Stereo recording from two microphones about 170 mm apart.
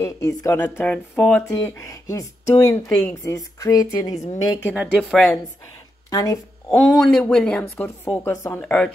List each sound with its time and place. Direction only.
0.0 s speech: 20° left (ahead or behind)
1.5 s speech: 20° left (ahead or behind)
4.9 s speech: centre (ahead or behind)
6.0 s speech: 20° left (ahead or behind)
6.7 s speech: centre (ahead or behind)